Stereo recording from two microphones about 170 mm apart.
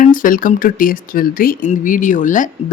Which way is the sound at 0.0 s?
55° left (ahead or behind).